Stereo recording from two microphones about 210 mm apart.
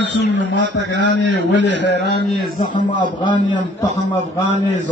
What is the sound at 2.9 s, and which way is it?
Speech, 20° left (ahead or behind).